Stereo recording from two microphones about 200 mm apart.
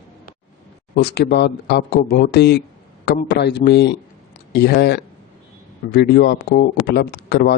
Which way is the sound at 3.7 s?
55° left (ahead or behind).